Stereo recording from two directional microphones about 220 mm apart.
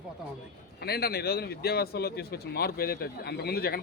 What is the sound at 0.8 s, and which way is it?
Speech, 45° left (ahead or behind).